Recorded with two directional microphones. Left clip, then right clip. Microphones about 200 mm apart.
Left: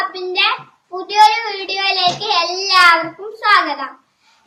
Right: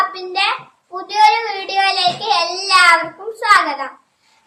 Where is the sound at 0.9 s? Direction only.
20° right (ahead or behind).